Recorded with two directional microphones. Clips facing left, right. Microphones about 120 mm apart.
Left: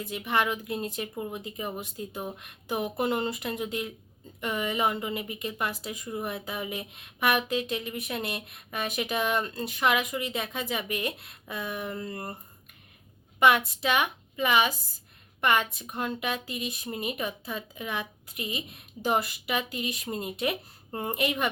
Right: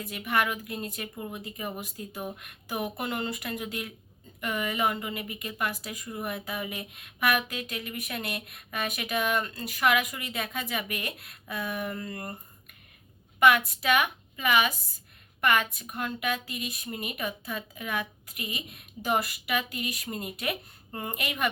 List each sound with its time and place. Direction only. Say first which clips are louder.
0.0 s a woman's voice: left 1 dB; 25° left (ahead or behind)
13.7 s a woman's voice: right 1 dB; 25° left (ahead or behind)